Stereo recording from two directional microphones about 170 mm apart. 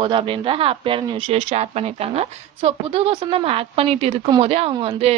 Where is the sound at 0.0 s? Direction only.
30° right (ahead or behind).